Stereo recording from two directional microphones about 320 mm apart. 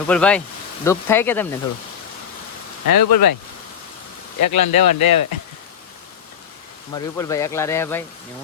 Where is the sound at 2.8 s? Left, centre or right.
Left.